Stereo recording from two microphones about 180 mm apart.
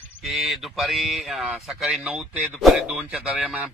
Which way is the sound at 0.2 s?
Centre (ahead or behind).